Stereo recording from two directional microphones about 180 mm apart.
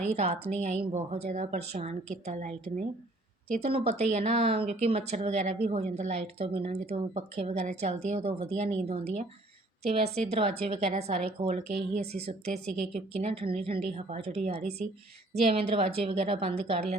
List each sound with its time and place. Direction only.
0.0 s speech: 40° right (ahead or behind)